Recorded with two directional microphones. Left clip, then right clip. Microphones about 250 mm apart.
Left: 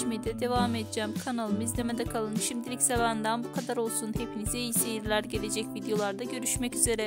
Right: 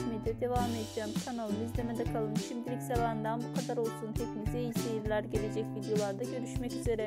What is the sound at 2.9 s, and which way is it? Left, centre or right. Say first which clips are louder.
Speech: left 6 dB; left.